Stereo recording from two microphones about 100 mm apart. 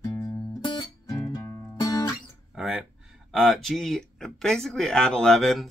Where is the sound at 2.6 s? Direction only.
Centre (ahead or behind).